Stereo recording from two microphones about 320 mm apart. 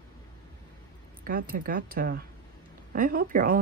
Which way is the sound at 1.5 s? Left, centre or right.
Right.